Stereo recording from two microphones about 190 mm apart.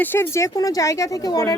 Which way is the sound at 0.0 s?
10° left (ahead or behind).